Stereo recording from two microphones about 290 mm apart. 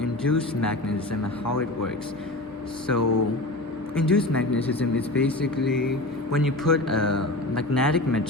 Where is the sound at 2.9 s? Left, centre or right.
Left.